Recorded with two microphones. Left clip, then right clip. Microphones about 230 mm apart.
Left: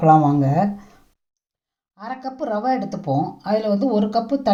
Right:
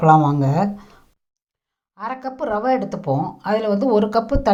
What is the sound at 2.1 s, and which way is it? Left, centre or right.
A woman's voice, right.